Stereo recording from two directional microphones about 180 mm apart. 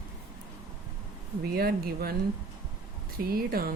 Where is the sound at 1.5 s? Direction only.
60° right (ahead or behind).